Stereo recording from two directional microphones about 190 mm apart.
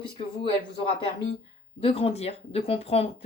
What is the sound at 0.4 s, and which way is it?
Speech, 30° left (ahead or behind).